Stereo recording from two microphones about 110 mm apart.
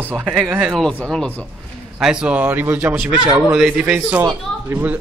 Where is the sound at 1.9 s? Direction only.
5° right (ahead or behind).